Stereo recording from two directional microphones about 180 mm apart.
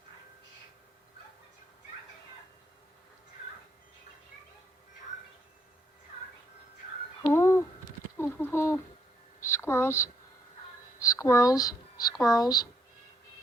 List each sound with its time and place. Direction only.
7.2 s a sound: 15° left (ahead or behind)
8.2 s speech: 10° left (ahead or behind)
12.1 s speech: centre (ahead or behind)
12.4 s speech: 20° left (ahead or behind)